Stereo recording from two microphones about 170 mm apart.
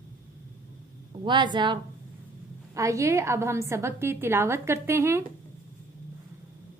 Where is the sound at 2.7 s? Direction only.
20° right (ahead or behind).